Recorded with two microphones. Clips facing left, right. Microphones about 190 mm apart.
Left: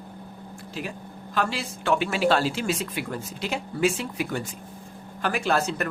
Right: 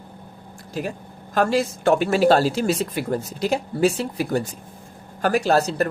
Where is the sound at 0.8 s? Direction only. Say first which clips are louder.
Right 6 dB; 45° right (ahead or behind).